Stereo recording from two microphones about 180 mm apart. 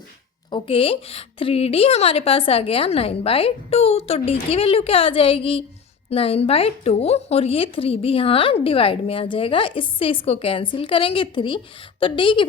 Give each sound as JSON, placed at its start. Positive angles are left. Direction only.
{"t": 0.5, "sound": "a woman's voice", "side_deg": 30}